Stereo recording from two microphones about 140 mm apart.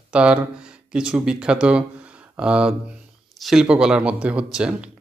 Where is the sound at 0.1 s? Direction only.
10° right (ahead or behind).